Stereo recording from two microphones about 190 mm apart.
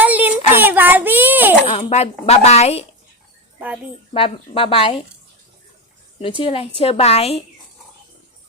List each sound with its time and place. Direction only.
0.0 s child singing: 10° right (ahead or behind)
1.6 s speech: 30° left (ahead or behind)
4.1 s speech: 30° left (ahead or behind)
6.1 s speech: 30° left (ahead or behind)